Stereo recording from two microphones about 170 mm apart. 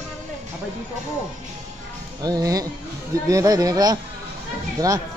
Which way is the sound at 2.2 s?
20° right (ahead or behind).